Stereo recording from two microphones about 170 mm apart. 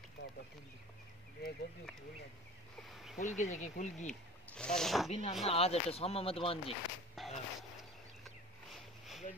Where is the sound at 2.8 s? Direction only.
Centre (ahead or behind).